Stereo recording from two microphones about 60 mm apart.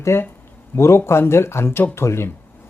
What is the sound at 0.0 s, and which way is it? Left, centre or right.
Speech, left.